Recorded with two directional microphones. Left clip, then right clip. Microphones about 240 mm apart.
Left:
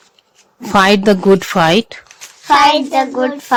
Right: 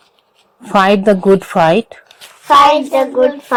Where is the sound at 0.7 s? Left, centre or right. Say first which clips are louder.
Even; centre.